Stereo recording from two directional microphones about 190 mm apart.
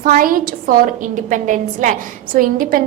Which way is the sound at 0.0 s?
45° right (ahead or behind).